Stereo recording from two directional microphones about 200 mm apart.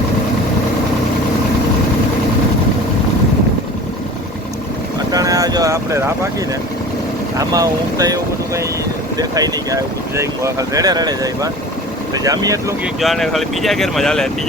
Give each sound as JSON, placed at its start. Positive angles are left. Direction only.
{"t": 5.1, "sound": "vehicle", "side_deg": -15}
{"t": 7.3, "sound": "speech", "side_deg": -15}
{"t": 13.0, "sound": "speech", "side_deg": 0}